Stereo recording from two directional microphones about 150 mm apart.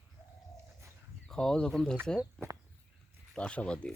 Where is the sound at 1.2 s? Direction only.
5° left (ahead or behind).